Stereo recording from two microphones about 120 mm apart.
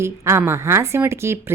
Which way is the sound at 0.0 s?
20° right (ahead or behind).